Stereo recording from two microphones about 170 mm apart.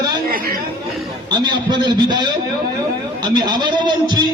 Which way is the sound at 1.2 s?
25° right (ahead or behind).